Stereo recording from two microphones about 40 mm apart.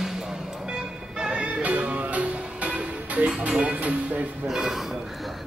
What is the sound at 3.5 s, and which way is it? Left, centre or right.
Speech, right.